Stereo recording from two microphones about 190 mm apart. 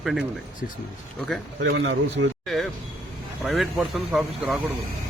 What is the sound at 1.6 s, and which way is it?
Speech, 80° right.